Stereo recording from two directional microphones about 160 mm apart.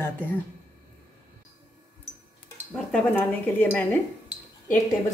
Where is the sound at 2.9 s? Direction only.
10° left (ahead or behind).